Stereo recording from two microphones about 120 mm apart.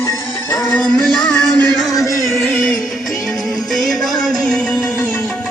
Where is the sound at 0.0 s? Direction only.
30° left (ahead or behind).